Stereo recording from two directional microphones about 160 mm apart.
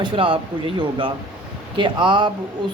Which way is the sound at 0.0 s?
35° right (ahead or behind).